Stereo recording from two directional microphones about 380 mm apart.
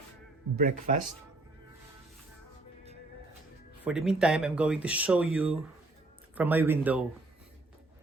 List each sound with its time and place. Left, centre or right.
0.5 s speech: right
3.8 s speech: centre